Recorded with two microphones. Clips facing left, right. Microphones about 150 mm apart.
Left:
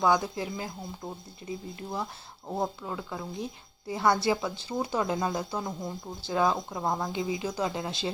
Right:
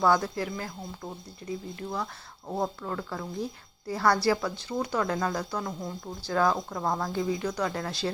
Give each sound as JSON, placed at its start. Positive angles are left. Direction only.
{"t": 0.0, "sound": "speech", "side_deg": 20}
{"t": 2.5, "sound": "speech", "side_deg": 10}